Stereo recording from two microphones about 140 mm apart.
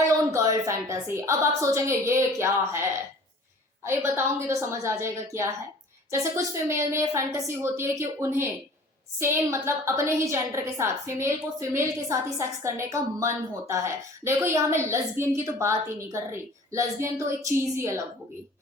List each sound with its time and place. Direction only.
0.3 s a woman's voice: 25° right (ahead or behind)
3.8 s a woman's voice: 20° right (ahead or behind)